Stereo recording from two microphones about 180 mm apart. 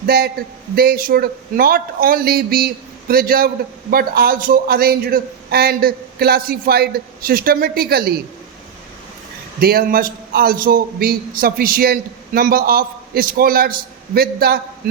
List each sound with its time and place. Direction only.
0.0 s a man's voice: 60° right (ahead or behind)
9.6 s a man's voice: 55° right (ahead or behind)